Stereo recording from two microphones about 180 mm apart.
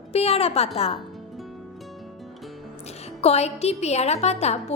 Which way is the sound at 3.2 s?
35° left (ahead or behind).